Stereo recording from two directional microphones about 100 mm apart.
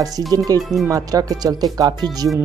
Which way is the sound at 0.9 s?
35° right (ahead or behind).